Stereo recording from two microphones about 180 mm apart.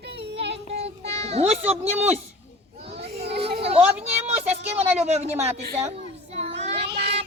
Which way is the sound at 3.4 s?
35° right (ahead or behind).